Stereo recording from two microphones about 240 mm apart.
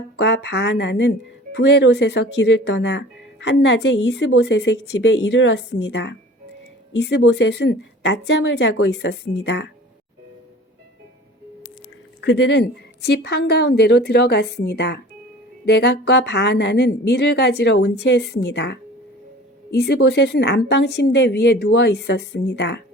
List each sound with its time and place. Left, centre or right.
0.2 s speech: left
12.2 s speech: left